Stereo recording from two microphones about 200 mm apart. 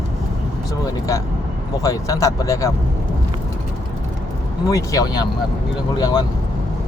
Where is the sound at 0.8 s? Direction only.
15° left (ahead or behind).